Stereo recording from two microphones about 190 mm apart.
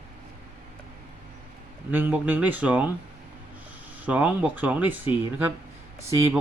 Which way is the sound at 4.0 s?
5° right (ahead or behind).